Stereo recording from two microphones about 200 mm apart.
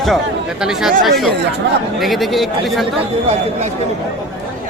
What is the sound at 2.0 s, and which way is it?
Speech, centre (ahead or behind).